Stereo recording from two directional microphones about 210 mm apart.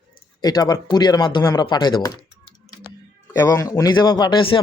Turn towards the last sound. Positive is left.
turn(degrees=25)  # may be behind; listen again after turning